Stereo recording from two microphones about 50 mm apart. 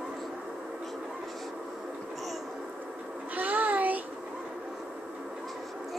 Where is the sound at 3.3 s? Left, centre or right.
Right.